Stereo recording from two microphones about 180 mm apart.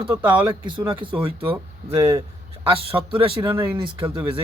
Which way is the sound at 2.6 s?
30° right (ahead or behind).